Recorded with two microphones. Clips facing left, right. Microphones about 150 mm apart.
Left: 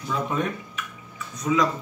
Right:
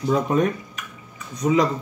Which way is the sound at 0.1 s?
40° right (ahead or behind).